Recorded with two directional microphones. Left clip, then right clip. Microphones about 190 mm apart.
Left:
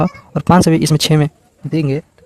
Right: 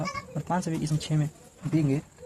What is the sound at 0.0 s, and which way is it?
Speech, 55° left (ahead or behind).